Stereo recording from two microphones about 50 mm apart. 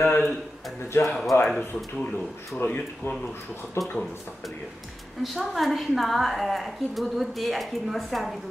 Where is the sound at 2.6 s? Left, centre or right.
Left.